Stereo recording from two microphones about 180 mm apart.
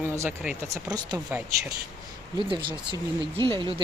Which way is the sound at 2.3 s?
25° right (ahead or behind).